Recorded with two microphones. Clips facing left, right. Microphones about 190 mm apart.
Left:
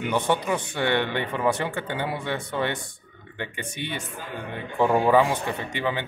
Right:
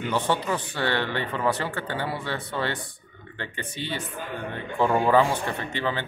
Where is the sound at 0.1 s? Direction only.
15° left (ahead or behind).